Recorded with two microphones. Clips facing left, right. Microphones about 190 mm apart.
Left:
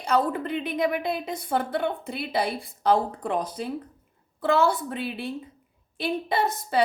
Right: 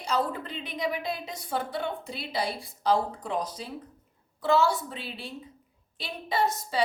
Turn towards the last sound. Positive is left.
turn(degrees=55)  # may be behind; listen again after turning